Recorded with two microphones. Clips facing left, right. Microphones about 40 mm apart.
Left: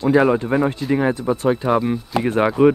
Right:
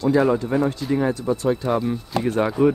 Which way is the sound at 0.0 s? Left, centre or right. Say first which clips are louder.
Left 3 dB; left.